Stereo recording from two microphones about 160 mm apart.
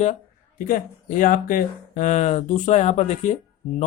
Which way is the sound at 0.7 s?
55° left (ahead or behind).